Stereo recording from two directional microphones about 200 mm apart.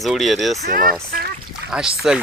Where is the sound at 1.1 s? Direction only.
45° right (ahead or behind).